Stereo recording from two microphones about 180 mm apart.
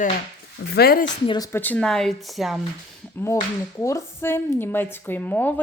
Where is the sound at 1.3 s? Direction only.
20° left (ahead or behind); by 2.5 s centre (ahead or behind).